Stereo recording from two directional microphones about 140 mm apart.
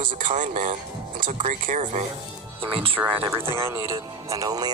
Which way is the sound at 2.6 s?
40° right (ahead or behind).